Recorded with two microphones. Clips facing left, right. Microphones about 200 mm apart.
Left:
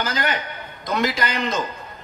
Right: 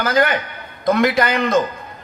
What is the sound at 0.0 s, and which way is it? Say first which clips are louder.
A woman's voice: right 7 dB; 55° right (ahead or behind).